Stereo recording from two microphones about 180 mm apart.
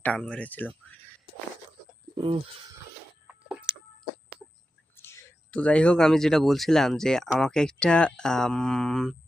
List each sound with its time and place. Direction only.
0.0 s speech: 5° left (ahead or behind)
2.1 s speech: 30° right (ahead or behind)
3.2 s a sound: 5° right (ahead or behind)
4.9 s speech: 15° left (ahead or behind)